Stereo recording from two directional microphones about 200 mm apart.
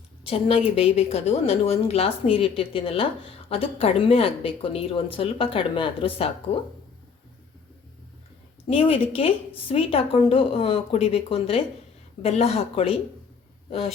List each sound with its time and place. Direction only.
0.3 s a woman's voice: 30° left (ahead or behind)
8.6 s a woman's voice: 30° left (ahead or behind)